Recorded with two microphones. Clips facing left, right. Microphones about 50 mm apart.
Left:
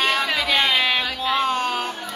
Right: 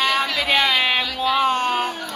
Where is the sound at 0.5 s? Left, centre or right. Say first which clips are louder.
Right 2 dB; centre.